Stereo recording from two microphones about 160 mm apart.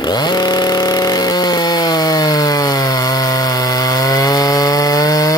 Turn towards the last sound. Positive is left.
turn(degrees=20)  # may be behind; listen again after turning